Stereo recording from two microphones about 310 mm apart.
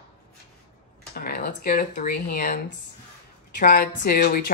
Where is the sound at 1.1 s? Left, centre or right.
Left.